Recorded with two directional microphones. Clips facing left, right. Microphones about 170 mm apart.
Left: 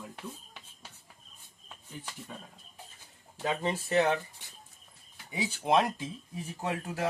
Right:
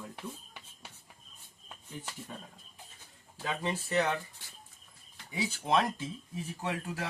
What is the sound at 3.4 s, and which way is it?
Speech, 20° left (ahead or behind).